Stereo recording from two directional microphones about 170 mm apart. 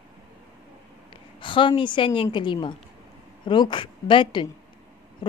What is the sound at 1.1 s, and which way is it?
A woman's voice, 30° left (ahead or behind).